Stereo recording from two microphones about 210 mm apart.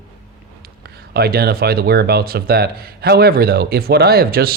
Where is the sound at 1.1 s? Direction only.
50° right (ahead or behind).